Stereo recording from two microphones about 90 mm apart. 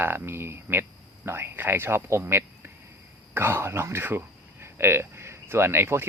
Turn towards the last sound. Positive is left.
turn(degrees=-25)  # may be behind; listen again after turning